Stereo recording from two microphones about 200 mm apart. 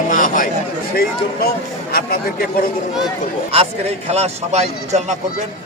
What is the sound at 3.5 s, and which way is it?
A man's voice, 30° right (ahead or behind).